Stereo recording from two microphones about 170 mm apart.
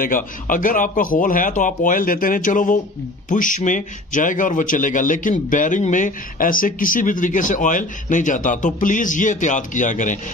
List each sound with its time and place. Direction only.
0.0 s a man's voice: 50° left (ahead or behind)